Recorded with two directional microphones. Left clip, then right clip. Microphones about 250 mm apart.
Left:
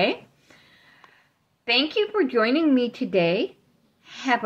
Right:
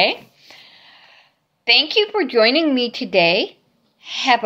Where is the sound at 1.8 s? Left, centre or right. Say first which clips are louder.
Right 5 dB; right.